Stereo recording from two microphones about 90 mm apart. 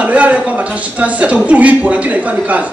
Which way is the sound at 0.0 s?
15° right (ahead or behind).